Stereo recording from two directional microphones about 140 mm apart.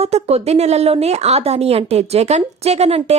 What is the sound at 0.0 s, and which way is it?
A woman's voice, 50° right (ahead or behind).